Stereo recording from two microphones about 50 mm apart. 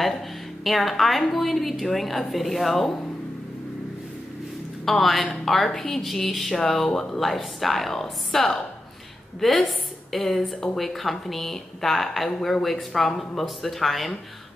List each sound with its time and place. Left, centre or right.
0.7 s a woman's voice: centre
4.8 s a woman's voice: centre
12.3 s a woman's voice: centre